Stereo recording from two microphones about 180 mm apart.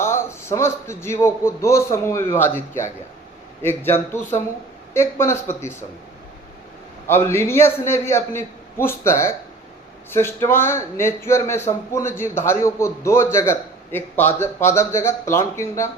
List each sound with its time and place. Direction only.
0.0 s a man's voice: 15° left (ahead or behind)
3.6 s a man's voice: 15° left (ahead or behind)
7.1 s a man's voice: 15° left (ahead or behind)